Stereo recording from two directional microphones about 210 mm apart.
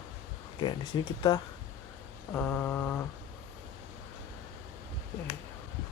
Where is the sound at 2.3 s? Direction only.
10° left (ahead or behind).